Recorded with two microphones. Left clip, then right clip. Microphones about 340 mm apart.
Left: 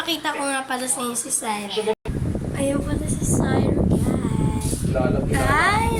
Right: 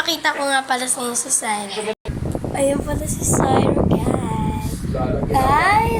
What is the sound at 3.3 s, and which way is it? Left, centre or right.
Speech, right.